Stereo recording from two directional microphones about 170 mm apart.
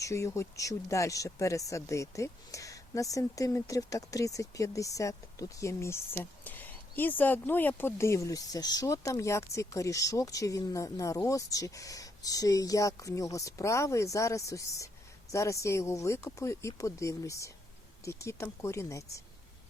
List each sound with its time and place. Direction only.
0.0 s speech: 20° left (ahead or behind)